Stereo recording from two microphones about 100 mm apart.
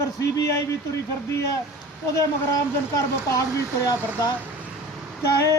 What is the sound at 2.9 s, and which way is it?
Speech, 30° left (ahead or behind).